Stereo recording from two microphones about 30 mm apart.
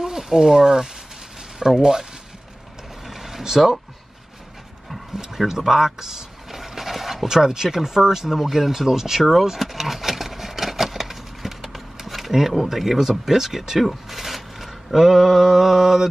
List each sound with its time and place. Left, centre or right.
0.0 s speech: centre
3.1 s a sound: centre
4.9 s vehicle: centre
7.2 s speech: centre
8.3 s vehicle: centre
11.7 s a sound: centre
13.2 s speech: centre